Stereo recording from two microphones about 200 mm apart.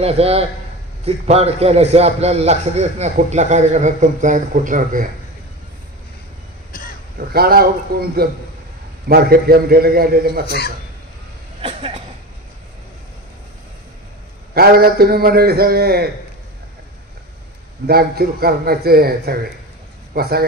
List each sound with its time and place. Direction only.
0.0 s a man's voice: 30° right (ahead or behind)
6.7 s throat clearing: 45° left (ahead or behind)
7.2 s a man's voice: 50° right (ahead or behind)
9.1 s a man's voice: 50° right (ahead or behind)
10.4 s speech: 50° left (ahead or behind)
11.6 s speech: 30° right (ahead or behind)
14.5 s a man's voice: 50° right (ahead or behind)
17.8 s a man's voice: 50° right (ahead or behind)